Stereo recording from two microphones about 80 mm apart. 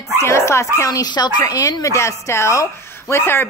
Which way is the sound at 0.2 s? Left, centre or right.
Left.